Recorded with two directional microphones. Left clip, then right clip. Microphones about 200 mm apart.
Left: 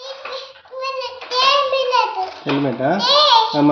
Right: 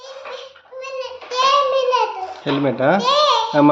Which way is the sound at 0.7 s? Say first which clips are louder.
Left 3 dB; 25° right (ahead or behind).